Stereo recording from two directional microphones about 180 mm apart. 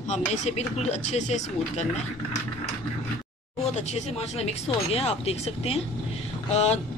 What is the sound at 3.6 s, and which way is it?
Speech, 35° left (ahead or behind).